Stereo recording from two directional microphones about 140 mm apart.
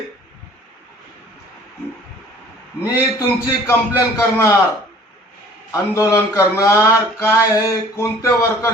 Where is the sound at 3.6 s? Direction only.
15° left (ahead or behind).